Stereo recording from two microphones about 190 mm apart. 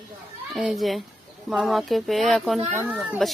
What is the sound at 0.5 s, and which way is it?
Speech, centre (ahead or behind).